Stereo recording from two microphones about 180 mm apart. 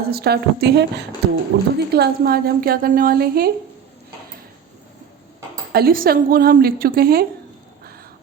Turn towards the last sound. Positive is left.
turn(degrees=-55)  # may be behind; listen again after turning